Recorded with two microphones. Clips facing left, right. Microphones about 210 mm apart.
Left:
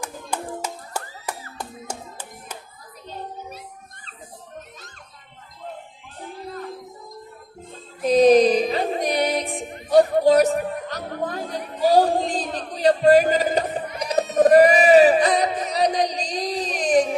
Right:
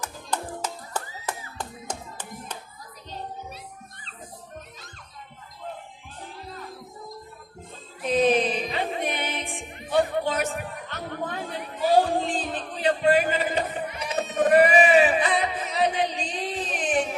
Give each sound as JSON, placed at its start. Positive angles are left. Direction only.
{"t": 0.0, "sound": "music", "side_deg": 10}
{"t": 8.0, "sound": "music", "side_deg": 40}